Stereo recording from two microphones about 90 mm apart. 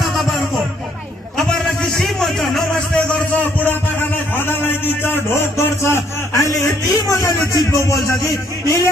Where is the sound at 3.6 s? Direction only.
25° left (ahead or behind).